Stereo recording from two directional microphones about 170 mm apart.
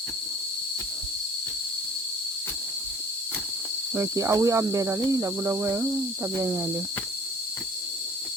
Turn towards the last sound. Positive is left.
turn(degrees=-15)  # may be behind; listen again after turning